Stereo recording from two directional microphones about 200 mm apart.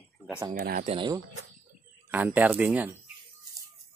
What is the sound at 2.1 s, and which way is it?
Speech, 10° right (ahead or behind).